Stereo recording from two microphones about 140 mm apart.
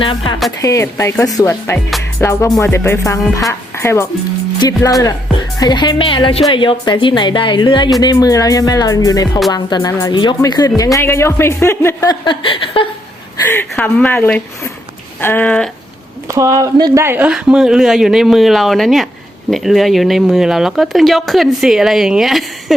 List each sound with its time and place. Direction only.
0.0 s speech: 40° left (ahead or behind)
0.6 s speech: 20° left (ahead or behind)
12.2 s a sound: 35° left (ahead or behind)
13.5 s speech: 15° left (ahead or behind)
16.3 s speech: 25° right (ahead or behind); by 22.4 s centre (ahead or behind)